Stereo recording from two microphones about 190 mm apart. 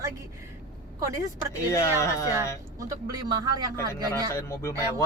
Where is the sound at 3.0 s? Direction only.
20° right (ahead or behind).